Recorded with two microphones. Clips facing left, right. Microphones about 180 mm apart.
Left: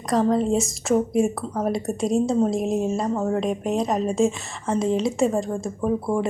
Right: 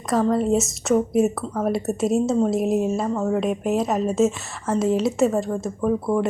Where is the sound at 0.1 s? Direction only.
Centre (ahead or behind).